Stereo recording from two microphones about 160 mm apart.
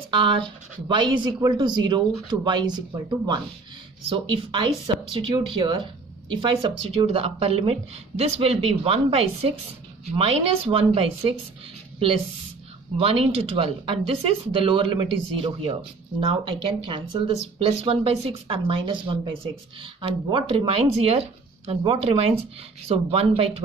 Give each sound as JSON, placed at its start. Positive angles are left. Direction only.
{"t": 0.1, "sound": "speech", "side_deg": -30}
{"t": 12.9, "sound": "speech", "side_deg": -35}